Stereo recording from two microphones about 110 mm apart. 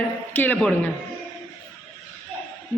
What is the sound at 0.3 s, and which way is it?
Speech, 15° left (ahead or behind).